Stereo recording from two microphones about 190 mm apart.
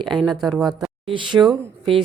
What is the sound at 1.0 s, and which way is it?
Speech, 25° right (ahead or behind).